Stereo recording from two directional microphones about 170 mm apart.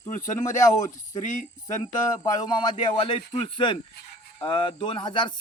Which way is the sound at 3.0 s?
30° left (ahead or behind).